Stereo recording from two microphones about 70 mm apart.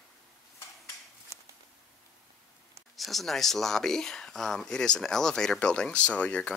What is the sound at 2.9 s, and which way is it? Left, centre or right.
Speech, centre.